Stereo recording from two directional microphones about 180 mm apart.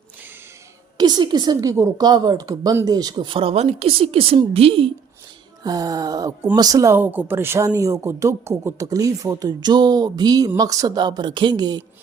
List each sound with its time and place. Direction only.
0.9 s speech: 25° right (ahead or behind)
5.6 s speech: 20° right (ahead or behind)